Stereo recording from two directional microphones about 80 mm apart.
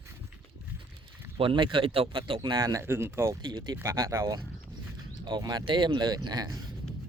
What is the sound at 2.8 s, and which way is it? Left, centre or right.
Speech, right.